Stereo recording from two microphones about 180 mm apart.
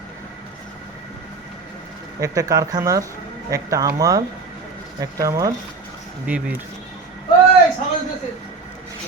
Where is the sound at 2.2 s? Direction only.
20° right (ahead or behind).